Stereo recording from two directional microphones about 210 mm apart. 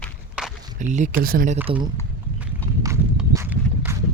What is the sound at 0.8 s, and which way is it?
Speech, 35° right (ahead or behind).